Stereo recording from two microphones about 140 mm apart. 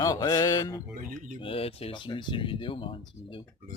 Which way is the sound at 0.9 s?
75° right (ahead or behind).